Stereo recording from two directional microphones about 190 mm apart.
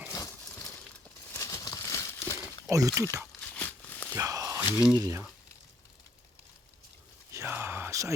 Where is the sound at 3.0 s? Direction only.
15° right (ahead or behind).